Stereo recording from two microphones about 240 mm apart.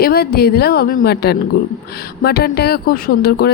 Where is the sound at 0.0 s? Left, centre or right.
Left.